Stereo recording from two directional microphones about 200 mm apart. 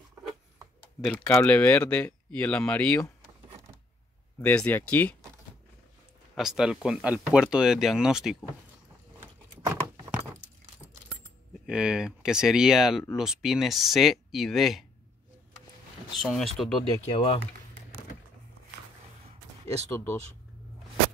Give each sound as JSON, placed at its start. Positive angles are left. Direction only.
{"t": 1.3, "sound": "speech", "side_deg": 10}
{"t": 4.4, "sound": "speech", "side_deg": 10}
{"t": 6.3, "sound": "speech", "side_deg": 0}
{"t": 9.2, "sound": "keys jangling", "side_deg": -15}
{"t": 11.6, "sound": "speech", "side_deg": -5}
{"t": 16.2, "sound": "speech", "side_deg": 0}
{"t": 17.1, "sound": "speech", "side_deg": 25}